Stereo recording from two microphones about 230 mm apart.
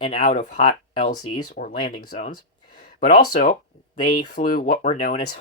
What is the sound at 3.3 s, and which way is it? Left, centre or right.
Speech, left.